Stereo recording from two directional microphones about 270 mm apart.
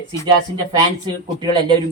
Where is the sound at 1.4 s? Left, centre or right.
Centre.